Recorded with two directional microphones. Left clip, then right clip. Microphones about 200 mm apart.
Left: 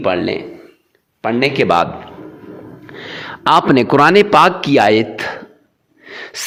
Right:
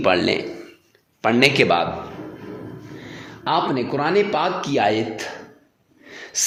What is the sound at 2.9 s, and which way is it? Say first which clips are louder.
A man's voice: left 10 dB; 45° left (ahead or behind).